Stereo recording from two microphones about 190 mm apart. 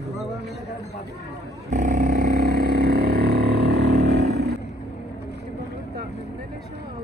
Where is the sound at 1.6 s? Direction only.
40° right (ahead or behind); by 4.5 s 60° right (ahead or behind).